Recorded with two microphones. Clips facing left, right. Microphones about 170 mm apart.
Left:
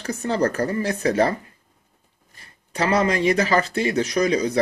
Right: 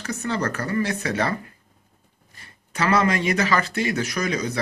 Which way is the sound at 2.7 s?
30° left (ahead or behind).